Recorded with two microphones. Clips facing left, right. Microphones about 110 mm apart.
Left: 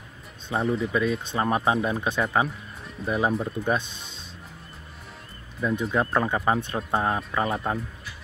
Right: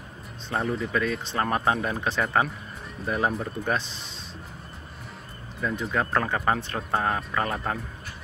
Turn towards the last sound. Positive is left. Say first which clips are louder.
# left 2 dB
turn(degrees=5)  # may be behind; listen again after turning